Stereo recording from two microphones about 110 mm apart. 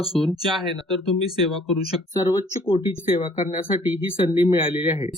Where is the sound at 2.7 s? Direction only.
55° left (ahead or behind).